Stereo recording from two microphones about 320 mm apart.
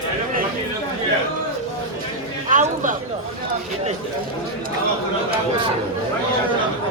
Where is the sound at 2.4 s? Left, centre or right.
Right.